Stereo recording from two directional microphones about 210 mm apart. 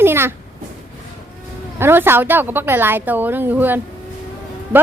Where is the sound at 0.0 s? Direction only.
10° right (ahead or behind).